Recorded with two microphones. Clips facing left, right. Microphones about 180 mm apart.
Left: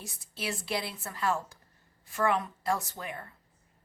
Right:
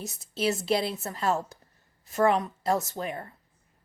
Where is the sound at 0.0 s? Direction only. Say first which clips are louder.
Right 10 dB; 20° right (ahead or behind).